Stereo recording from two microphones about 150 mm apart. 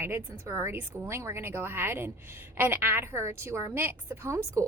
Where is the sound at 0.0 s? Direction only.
15° right (ahead or behind).